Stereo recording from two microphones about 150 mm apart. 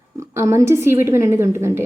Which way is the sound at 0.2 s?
20° right (ahead or behind).